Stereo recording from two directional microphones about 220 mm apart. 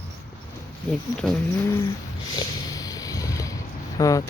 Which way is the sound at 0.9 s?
5° left (ahead or behind).